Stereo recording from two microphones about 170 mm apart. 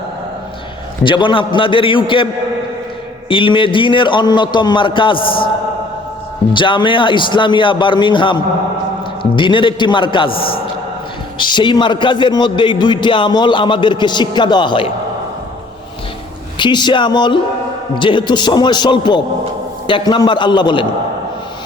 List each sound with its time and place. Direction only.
1.0 s a man's voice: 30° left (ahead or behind)
3.2 s a man's voice: 30° left (ahead or behind)
6.5 s a man's voice: 30° left (ahead or behind)
16.6 s a man's voice: 25° left (ahead or behind)